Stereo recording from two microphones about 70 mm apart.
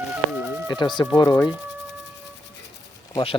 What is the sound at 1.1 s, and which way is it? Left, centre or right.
Speech, left.